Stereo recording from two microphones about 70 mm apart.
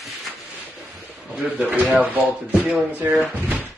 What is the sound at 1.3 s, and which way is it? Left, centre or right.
Music, right.